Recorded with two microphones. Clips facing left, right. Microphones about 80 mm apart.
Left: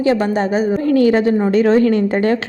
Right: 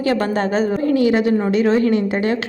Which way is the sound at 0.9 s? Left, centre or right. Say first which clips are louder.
Left 3 dB; left.